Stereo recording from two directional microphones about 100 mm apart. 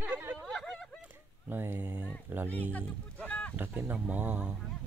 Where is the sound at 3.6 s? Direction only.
20° right (ahead or behind).